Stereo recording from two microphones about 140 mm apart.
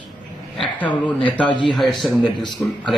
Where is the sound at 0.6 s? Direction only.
10° left (ahead or behind).